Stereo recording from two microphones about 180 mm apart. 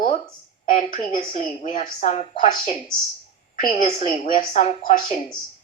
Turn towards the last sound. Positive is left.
turn(degrees=40)  # may be behind; listen again after turning